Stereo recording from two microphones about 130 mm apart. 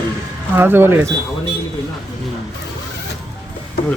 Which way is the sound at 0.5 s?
15° right (ahead or behind).